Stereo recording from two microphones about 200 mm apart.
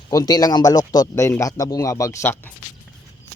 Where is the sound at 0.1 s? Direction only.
20° left (ahead or behind).